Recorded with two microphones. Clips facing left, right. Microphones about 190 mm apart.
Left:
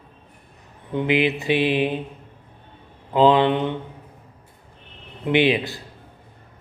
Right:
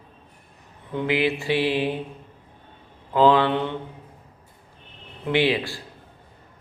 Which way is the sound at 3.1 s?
20° left (ahead or behind).